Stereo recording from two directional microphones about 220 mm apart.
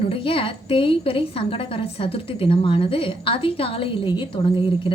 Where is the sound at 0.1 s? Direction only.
25° left (ahead or behind).